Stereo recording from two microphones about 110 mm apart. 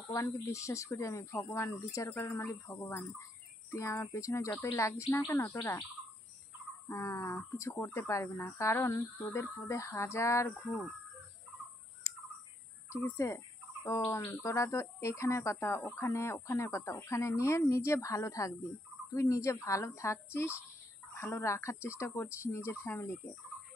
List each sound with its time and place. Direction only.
0.1 s speech: 30° left (ahead or behind)
6.9 s speech: 25° left (ahead or behind)
12.1 s bird: 25° left (ahead or behind)
12.9 s speech: 25° left (ahead or behind)
21.2 s speech: 25° left (ahead or behind)